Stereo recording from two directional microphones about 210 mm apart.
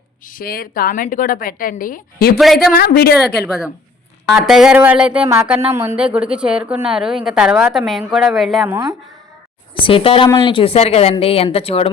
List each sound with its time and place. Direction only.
0.3 s a woman's voice: 45° left (ahead or behind)
3.4 s a woman's voice: 5° right (ahead or behind)
8.7 s speech: 15° right (ahead or behind)
9.8 s speech: 25° left (ahead or behind)